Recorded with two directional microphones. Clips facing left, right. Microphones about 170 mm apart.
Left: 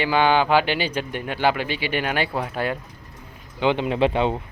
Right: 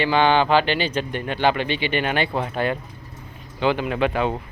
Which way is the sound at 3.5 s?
20° left (ahead or behind).